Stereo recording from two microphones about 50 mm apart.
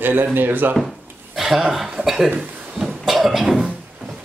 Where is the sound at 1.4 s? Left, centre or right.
Centre.